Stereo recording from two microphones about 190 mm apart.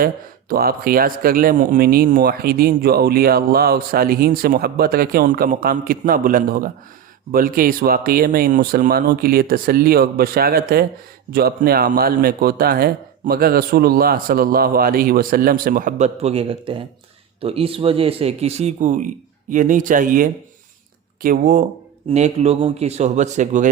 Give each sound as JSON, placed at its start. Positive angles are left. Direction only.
{"t": 0.0, "sound": "speech", "side_deg": -50}
{"t": 22.1, "sound": "speech", "side_deg": -35}